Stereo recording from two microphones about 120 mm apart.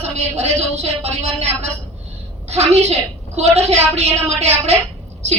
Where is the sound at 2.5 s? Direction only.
65° right (ahead or behind).